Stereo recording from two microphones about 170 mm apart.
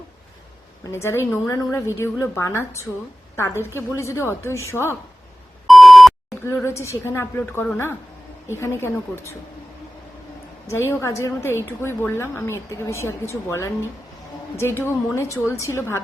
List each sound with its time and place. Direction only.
0.9 s a woman's voice: 15° left (ahead or behind)
5.6 s beep: centre (ahead or behind)
6.4 s a woman's voice: 15° left (ahead or behind)
10.7 s a woman's voice: 15° left (ahead or behind)